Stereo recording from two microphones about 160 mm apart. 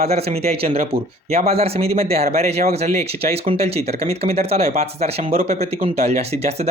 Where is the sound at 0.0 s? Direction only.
40° right (ahead or behind).